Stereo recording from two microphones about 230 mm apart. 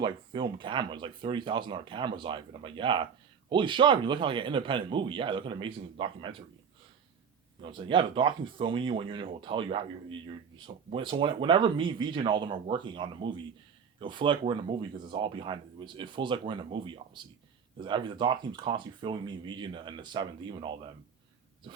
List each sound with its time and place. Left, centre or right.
0.0 s speech: right
7.6 s speech: right